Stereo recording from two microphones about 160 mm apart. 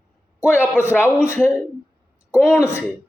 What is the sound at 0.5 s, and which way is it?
Speech, 10° right (ahead or behind).